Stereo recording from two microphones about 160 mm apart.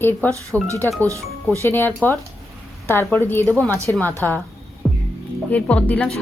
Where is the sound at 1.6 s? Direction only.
15° left (ahead or behind).